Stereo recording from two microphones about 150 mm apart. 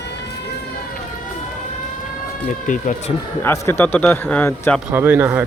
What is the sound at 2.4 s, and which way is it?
Speech, 60° left (ahead or behind).